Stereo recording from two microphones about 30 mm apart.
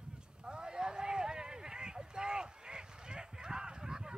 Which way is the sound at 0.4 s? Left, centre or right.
Right.